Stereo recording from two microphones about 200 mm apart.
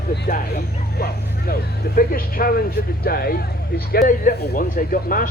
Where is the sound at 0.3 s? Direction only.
45° left (ahead or behind).